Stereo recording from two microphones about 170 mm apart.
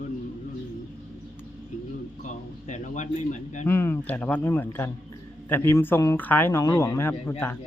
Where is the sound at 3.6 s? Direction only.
15° left (ahead or behind).